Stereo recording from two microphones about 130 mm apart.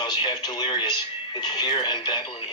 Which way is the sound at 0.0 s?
35° left (ahead or behind).